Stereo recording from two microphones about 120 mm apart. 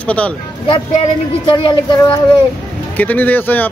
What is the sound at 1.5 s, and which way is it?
Speech, 40° left (ahead or behind).